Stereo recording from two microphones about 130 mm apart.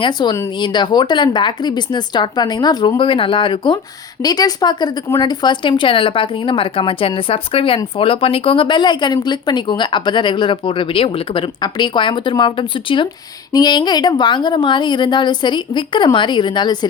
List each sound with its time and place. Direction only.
0.0 s speech: 35° left (ahead or behind)